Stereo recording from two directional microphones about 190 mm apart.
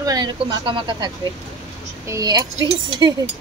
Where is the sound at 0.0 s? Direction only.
20° right (ahead or behind).